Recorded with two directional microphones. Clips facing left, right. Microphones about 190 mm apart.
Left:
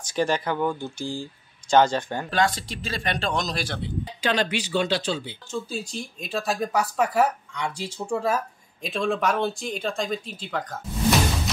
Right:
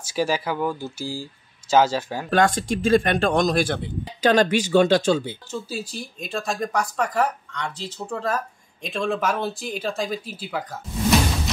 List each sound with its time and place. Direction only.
0.0 s speech: 5° right (ahead or behind)
2.3 s a man's voice: 50° right (ahead or behind)
5.5 s speech: 5° right (ahead or behind)